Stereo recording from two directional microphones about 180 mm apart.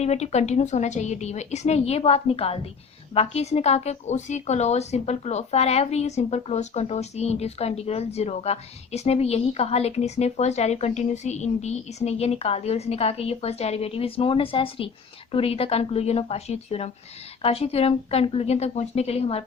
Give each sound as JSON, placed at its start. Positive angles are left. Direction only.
{"t": 0.0, "sound": "a woman's voice", "side_deg": 40}